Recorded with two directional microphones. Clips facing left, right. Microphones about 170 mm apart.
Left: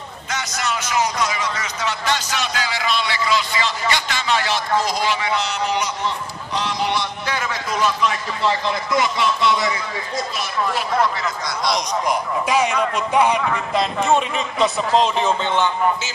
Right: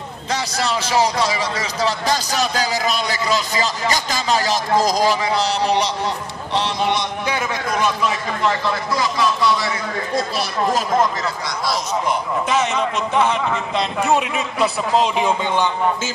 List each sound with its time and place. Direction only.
0.3 s a man's voice: 35° right (ahead or behind); by 7.9 s 15° right (ahead or behind)
8.5 s speech: 20° left (ahead or behind)
10.3 s a man's voice: 40° right (ahead or behind)
11.4 s speech: 5° right (ahead or behind)
12.1 s a man's voice: 10° left (ahead or behind)
13.9 s a man's voice: 5° right (ahead or behind)